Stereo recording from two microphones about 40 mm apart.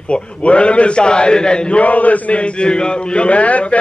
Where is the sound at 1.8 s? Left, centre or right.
Left.